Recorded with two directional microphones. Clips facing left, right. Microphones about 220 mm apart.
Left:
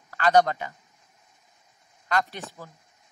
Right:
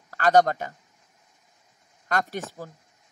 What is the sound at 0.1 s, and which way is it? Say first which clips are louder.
Speech: right 1 dB; 45° right (ahead or behind).